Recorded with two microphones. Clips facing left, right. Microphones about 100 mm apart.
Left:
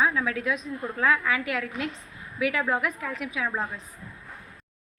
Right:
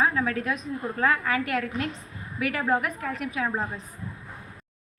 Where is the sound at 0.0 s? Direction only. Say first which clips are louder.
Right 1 dB; 45° right (ahead or behind).